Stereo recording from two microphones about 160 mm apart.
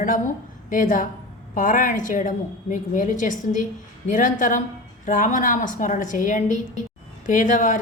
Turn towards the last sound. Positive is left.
turn(degrees=55)  # may be behind; listen again after turning